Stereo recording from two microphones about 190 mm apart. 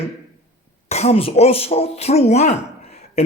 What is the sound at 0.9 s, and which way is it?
Speech, 35° left (ahead or behind).